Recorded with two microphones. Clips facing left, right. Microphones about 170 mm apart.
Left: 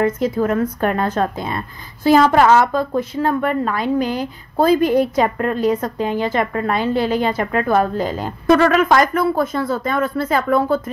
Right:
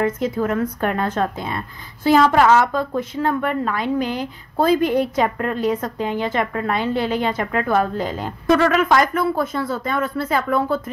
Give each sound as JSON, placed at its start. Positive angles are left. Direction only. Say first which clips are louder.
{"t": 0.0, "sound": "a woman's voice", "louder": "left 3 dB", "side_deg": 40}